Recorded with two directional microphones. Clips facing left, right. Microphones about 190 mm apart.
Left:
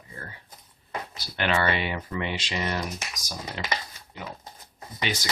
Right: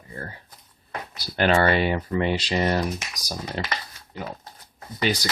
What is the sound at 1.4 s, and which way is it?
Speech, 40° right (ahead or behind).